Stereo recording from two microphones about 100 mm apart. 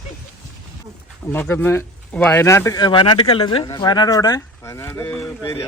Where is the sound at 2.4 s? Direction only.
30° left (ahead or behind).